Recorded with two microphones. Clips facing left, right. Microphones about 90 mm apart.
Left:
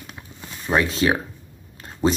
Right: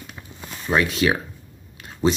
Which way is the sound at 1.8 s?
40° left (ahead or behind).